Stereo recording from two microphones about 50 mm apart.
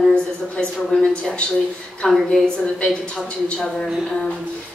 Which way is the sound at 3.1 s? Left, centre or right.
Centre.